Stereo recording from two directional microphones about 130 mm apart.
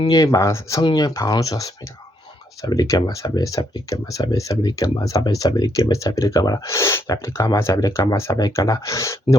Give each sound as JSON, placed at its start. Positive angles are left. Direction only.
{"t": 0.1, "sound": "speech", "side_deg": 25}